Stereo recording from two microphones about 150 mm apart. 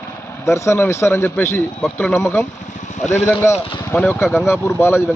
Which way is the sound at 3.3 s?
15° left (ahead or behind).